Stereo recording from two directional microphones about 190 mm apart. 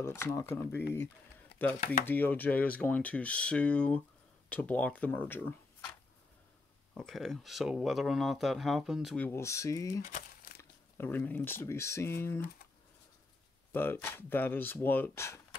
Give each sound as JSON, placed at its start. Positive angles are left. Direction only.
{"t": 0.0, "sound": "speech", "side_deg": 15}
{"t": 6.9, "sound": "speech", "side_deg": 5}
{"t": 10.0, "sound": "crumpling", "side_deg": 45}
{"t": 10.6, "sound": "speech", "side_deg": 10}
{"t": 13.7, "sound": "a sound", "side_deg": 10}
{"t": 13.9, "sound": "speech", "side_deg": 10}